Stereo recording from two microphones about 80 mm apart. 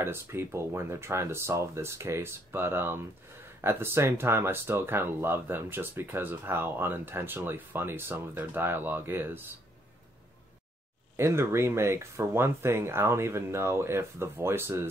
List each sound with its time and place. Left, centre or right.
0.0 s speech: right
11.1 s speech: right